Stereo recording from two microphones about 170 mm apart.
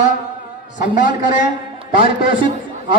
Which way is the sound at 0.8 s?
50° left (ahead or behind).